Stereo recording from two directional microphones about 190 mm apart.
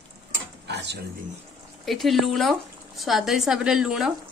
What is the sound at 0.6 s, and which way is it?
Dishes, 65° right (ahead or behind).